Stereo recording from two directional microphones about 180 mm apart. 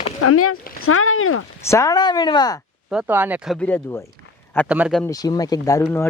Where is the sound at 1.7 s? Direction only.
15° left (ahead or behind).